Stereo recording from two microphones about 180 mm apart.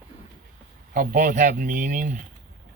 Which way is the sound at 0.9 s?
45° right (ahead or behind).